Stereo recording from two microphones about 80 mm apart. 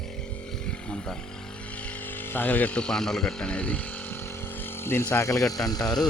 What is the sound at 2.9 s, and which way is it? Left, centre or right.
Speech, centre.